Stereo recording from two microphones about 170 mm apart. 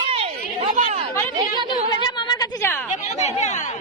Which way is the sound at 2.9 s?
40° left (ahead or behind).